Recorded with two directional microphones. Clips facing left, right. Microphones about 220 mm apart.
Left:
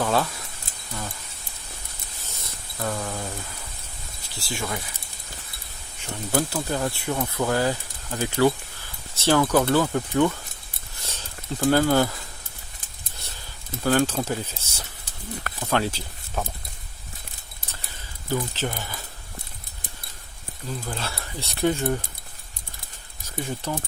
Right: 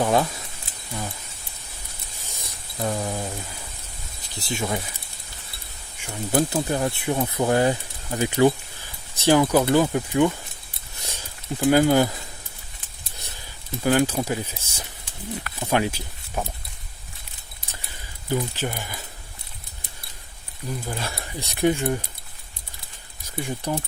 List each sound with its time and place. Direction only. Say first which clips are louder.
0.0 s speech: right 3 dB; 15° right (ahead or behind)
2.2 s a sound: even; 15° right (ahead or behind)
4.4 s speech: right 4 dB; 20° right (ahead or behind)
6.0 s speech: right 3 dB; 20° right (ahead or behind)
13.1 s a sound: right 1 dB; 15° right (ahead or behind)
13.8 s speech: right 1 dB; 10° right (ahead or behind)
18.3 s speech: right 1 dB; 15° right (ahead or behind)
20.7 s speech: right 2 dB; 15° right (ahead or behind)
23.6 s speech: right 4 dB; 15° right (ahead or behind)